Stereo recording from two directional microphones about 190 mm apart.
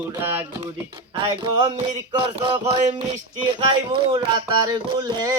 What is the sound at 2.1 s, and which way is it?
Speech, 30° right (ahead or behind).